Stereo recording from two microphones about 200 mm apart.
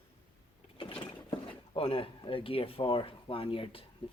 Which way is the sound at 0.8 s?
25° left (ahead or behind).